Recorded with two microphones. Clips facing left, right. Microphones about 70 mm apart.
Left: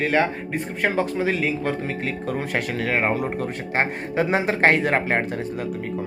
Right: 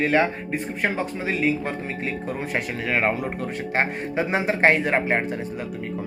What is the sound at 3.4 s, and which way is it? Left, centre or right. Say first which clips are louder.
Speech: left 1 dB; left.